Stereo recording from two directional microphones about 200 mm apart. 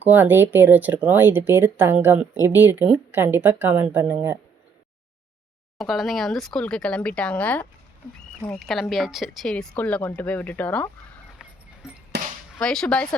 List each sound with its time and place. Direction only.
0.0 s speech: 10° right (ahead or behind)
5.7 s speech: centre (ahead or behind)
11.8 s a sound: 5° right (ahead or behind)
12.5 s speech: 5° left (ahead or behind)